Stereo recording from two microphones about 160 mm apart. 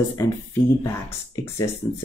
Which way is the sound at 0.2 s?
15° left (ahead or behind).